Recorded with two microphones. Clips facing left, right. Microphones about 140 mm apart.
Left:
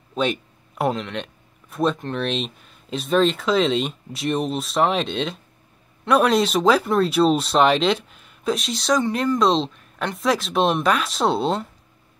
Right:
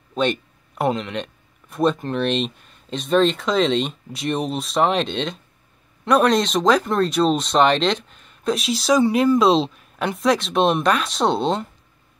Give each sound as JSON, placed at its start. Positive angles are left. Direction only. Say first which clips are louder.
{"t": 0.1, "sound": "speech", "louder": "right 2 dB", "side_deg": 0}